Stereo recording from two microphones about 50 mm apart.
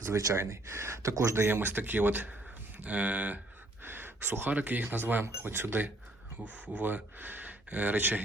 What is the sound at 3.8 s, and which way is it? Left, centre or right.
Speech, right.